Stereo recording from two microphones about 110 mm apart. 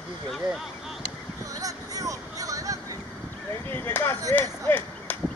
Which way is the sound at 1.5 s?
30° right (ahead or behind).